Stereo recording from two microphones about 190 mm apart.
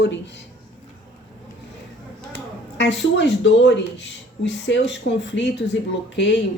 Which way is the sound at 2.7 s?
70° left (ahead or behind).